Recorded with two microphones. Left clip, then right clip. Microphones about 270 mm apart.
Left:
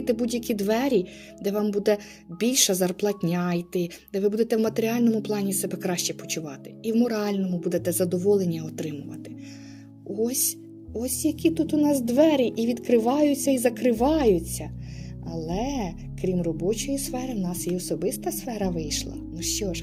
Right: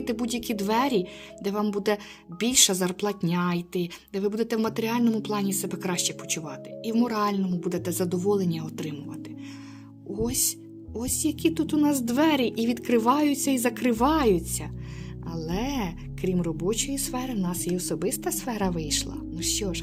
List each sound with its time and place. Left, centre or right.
0.0 s speech: centre
10.2 s a woman's voice: centre